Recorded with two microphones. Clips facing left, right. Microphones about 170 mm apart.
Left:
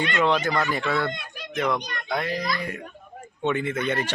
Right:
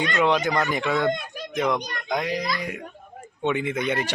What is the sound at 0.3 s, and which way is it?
Speech, 15° right (ahead or behind).